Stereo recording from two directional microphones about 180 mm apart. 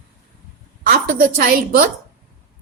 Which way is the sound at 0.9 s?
55° right (ahead or behind).